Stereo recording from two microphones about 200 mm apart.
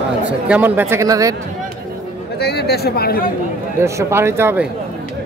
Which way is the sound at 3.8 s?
15° right (ahead or behind).